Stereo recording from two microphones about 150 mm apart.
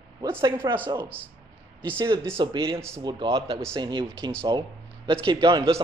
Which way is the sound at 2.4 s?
35° right (ahead or behind).